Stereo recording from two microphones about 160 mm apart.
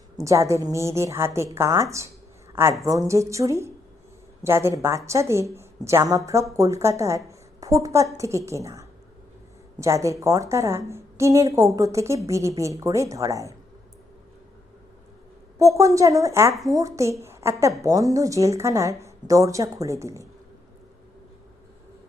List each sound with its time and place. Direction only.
0.2 s a woman's voice: 20° right (ahead or behind)
15.5 s a woman's voice: 20° right (ahead or behind)